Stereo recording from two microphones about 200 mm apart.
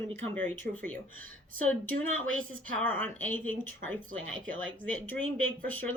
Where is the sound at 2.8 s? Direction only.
10° left (ahead or behind).